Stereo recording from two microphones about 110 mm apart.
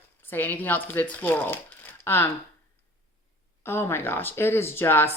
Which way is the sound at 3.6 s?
20° left (ahead or behind).